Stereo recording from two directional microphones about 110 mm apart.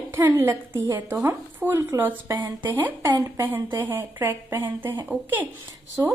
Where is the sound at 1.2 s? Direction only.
20° right (ahead or behind).